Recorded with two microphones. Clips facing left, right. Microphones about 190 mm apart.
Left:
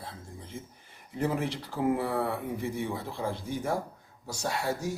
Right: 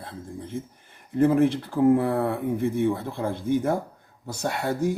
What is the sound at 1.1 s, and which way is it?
Speech, 55° right (ahead or behind).